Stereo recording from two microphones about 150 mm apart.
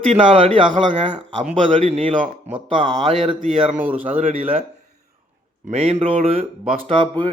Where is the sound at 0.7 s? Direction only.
60° right (ahead or behind).